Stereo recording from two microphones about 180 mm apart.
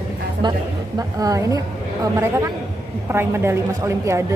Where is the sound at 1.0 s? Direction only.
20° right (ahead or behind).